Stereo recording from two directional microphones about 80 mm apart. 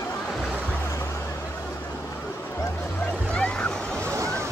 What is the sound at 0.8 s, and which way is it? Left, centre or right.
Music, left.